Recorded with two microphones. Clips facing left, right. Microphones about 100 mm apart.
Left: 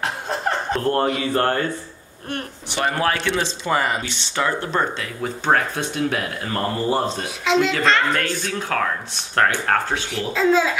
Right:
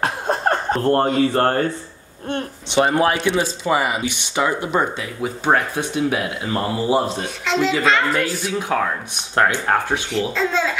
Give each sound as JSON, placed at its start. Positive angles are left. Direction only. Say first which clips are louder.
{"t": 0.7, "sound": "speech", "louder": "right 4 dB", "side_deg": -35}
{"t": 2.2, "sound": "speech", "louder": "right 4 dB", "side_deg": -20}
{"t": 7.4, "sound": "a child's voice", "louder": "even", "side_deg": 0}
{"t": 10.1, "sound": "a child's voice", "louder": "left 4 dB", "side_deg": 5}